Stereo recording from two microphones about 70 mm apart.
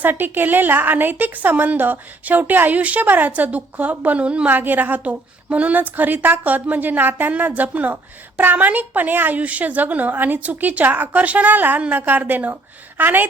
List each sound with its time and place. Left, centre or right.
0.0 s a woman's voice: right